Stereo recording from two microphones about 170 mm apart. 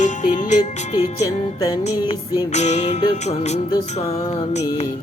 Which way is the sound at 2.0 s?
40° left (ahead or behind).